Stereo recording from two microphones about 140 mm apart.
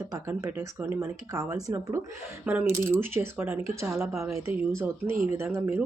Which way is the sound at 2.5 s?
10° right (ahead or behind).